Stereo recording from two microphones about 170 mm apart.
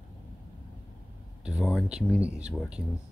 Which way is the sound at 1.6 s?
Centre (ahead or behind).